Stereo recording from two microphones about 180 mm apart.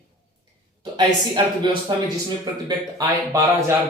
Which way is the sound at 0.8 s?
25° right (ahead or behind).